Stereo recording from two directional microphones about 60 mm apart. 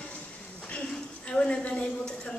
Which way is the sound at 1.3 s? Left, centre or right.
Centre.